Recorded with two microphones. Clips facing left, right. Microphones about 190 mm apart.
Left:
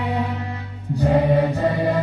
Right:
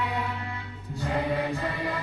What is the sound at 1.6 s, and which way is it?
Music, 40° left (ahead or behind).